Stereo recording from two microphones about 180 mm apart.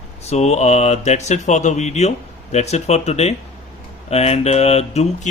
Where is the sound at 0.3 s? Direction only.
40° left (ahead or behind).